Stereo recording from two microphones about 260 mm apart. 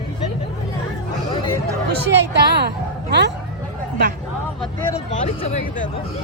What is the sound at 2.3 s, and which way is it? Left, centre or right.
A woman's voice, right.